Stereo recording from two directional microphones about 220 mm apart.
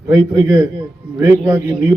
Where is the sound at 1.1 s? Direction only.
10° right (ahead or behind).